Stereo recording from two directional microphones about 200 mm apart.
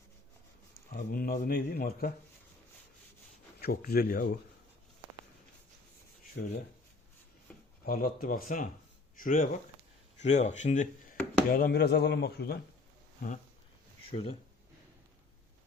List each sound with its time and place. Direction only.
0.9 s speech: 45° left (ahead or behind)
3.6 s speech: 50° left (ahead or behind)
6.3 s speech: 50° left (ahead or behind)
7.9 s speech: 45° left (ahead or behind)
14.1 s speech: 30° left (ahead or behind)